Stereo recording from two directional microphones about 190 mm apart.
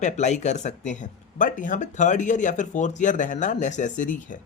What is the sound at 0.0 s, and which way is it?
Speech, 40° left (ahead or behind).